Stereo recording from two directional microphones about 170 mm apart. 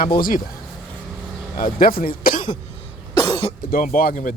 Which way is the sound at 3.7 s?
55° left (ahead or behind).